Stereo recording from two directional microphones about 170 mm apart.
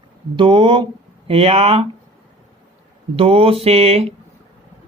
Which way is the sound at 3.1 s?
35° right (ahead or behind).